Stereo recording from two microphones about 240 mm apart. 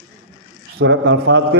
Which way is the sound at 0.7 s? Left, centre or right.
Right.